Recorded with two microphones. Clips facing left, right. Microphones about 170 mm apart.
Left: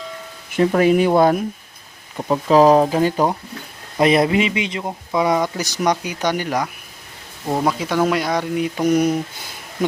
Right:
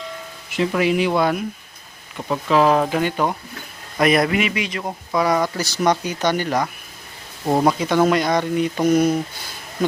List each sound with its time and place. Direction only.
0.5 s speech: 45° left (ahead or behind)
3.9 s speech: 25° left (ahead or behind); by 6.7 s 10° left (ahead or behind)
7.4 s speech: 15° right (ahead or behind)
7.7 s speech: 5° left (ahead or behind)